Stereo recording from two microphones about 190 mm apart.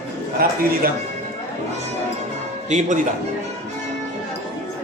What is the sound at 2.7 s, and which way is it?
Music, 40° right (ahead or behind).